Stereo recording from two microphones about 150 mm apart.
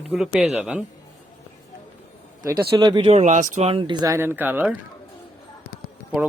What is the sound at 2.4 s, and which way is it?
Speech, 25° right (ahead or behind).